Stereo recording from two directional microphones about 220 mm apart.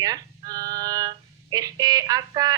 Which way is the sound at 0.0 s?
15° right (ahead or behind).